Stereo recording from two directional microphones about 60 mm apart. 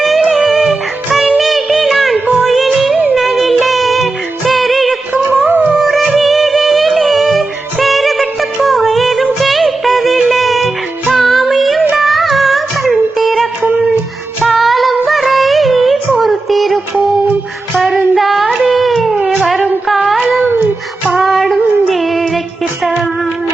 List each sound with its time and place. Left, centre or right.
0.0 s music: centre
2.1 s music: right
2.4 s music: centre
6.1 s music: centre
11.1 s child singing: centre
12.0 s music: centre
14.4 s female singing: centre
18.1 s a sound: centre
19.9 s humming: centre
21.1 s female singing: centre
22.8 s music: centre